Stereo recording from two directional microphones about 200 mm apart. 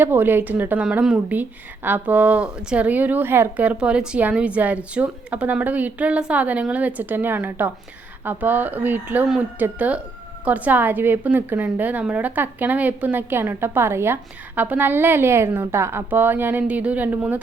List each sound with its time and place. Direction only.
0.0 s a woman's voice: 10° right (ahead or behind)